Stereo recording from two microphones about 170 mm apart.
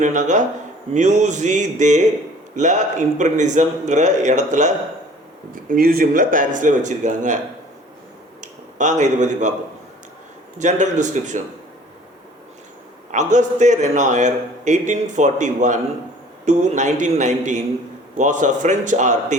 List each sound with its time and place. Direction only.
0.0 s a man's voice: 45° right (ahead or behind)
5.6 s a man's voice: 60° right (ahead or behind)
8.4 s speech: 45° right (ahead or behind)
10.6 s a man's voice: 45° right (ahead or behind)
13.1 s a man's voice: 45° right (ahead or behind)